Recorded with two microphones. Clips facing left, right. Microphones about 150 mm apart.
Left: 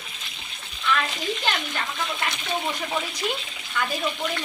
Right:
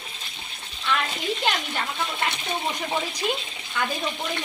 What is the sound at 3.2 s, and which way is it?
Speech, 20° right (ahead or behind).